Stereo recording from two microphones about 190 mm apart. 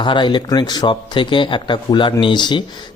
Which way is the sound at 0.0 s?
25° left (ahead or behind).